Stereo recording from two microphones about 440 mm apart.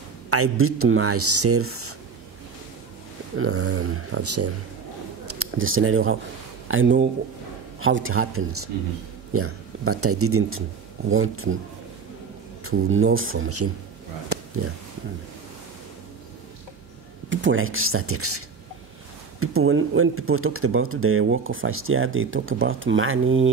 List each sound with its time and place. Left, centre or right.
0.3 s speech: right
3.3 s speech: right
12.6 s speech: right
17.3 s speech: right
19.4 s speech: right